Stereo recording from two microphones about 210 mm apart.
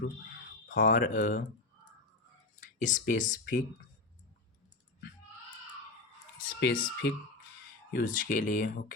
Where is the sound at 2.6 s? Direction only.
35° left (ahead or behind).